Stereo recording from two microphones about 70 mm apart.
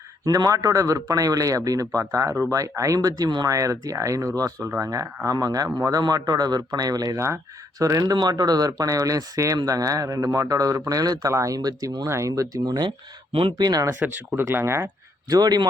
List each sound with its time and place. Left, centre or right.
0.3 s speech: right
3.5 s speech: right
8.1 s speech: right
11.3 s speech: right
12.0 s speech: right
12.3 s speech: right
14.3 s speech: right
15.3 s speech: right